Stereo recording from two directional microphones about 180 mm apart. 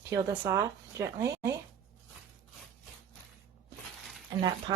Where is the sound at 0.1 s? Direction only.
15° right (ahead or behind).